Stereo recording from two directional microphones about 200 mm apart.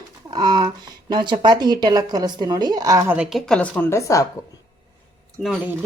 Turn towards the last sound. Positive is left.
turn(degrees=0)  # may be behind; listen again after turning